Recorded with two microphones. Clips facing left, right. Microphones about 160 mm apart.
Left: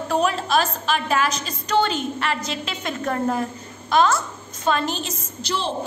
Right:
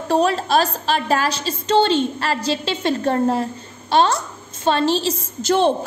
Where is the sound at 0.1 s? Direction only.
35° right (ahead or behind).